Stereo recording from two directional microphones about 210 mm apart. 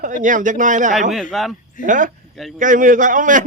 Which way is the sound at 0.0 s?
40° right (ahead or behind).